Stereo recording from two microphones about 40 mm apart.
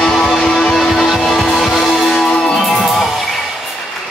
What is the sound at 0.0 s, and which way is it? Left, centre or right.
Music, centre.